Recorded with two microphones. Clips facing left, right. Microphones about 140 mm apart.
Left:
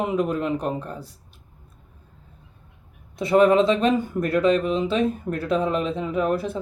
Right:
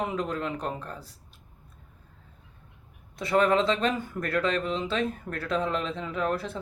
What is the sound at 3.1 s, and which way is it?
Speech, 20° left (ahead or behind).